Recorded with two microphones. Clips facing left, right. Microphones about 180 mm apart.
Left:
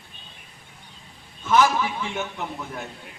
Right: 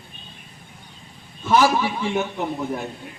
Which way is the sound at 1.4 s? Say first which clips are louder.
Right 2 dB; 30° right (ahead or behind).